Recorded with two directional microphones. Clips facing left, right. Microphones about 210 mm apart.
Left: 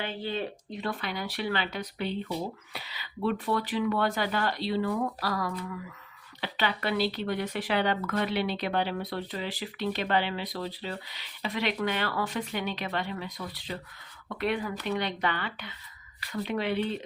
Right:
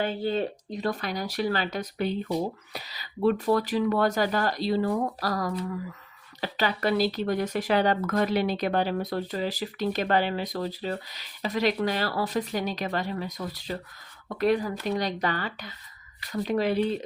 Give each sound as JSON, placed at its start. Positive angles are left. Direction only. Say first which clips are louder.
{"t": 0.0, "sound": "speech", "louder": "right 6 dB", "side_deg": -45}